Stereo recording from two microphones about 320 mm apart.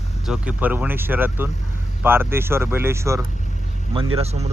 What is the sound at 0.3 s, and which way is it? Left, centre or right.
Speech, centre.